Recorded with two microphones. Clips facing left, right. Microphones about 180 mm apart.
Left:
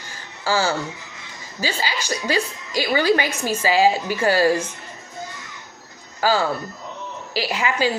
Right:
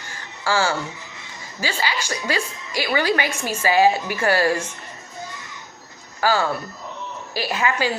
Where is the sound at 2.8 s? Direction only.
35° left (ahead or behind).